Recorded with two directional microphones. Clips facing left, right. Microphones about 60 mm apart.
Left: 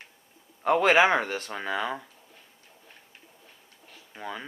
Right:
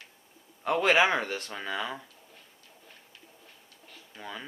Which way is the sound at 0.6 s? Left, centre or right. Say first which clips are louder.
Left 3 dB; left.